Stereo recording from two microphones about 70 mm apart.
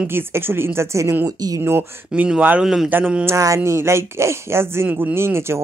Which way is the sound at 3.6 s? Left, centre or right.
Right.